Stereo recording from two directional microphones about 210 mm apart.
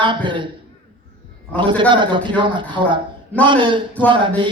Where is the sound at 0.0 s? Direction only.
20° right (ahead or behind).